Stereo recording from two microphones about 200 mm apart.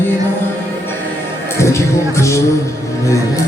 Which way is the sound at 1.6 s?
15° left (ahead or behind).